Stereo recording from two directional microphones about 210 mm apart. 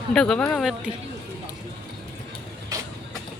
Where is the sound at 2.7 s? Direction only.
15° right (ahead or behind).